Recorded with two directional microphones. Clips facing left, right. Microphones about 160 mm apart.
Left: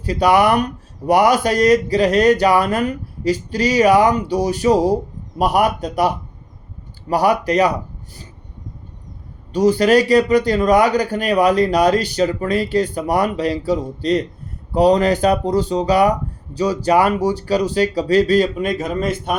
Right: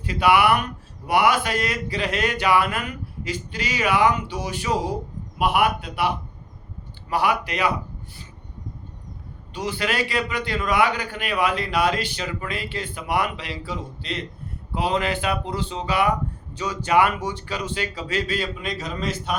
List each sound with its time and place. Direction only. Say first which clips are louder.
0.0 s speech: left 4 dB; 40° left (ahead or behind)
7.1 s speech: left 7 dB; 40° left (ahead or behind)
9.5 s speech: left 13 dB; 40° left (ahead or behind)